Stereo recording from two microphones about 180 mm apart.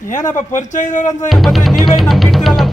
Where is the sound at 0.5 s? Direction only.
45° left (ahead or behind).